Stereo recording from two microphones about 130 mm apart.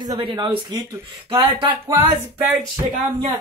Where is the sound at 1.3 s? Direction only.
45° right (ahead or behind).